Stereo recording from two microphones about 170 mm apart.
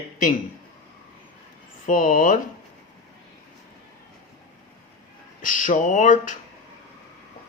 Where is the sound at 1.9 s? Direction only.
50° left (ahead or behind).